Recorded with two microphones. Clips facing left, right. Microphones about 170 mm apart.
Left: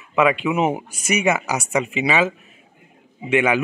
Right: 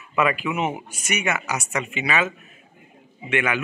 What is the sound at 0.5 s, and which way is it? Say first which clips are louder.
A man's voice: left 5 dB; 35° left (ahead or behind).